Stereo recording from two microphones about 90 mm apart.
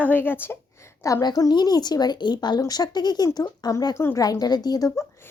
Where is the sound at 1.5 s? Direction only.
50° left (ahead or behind); by 4.2 s 30° left (ahead or behind).